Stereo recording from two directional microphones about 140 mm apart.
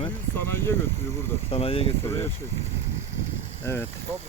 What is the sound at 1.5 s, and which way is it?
Speech, 45° left (ahead or behind).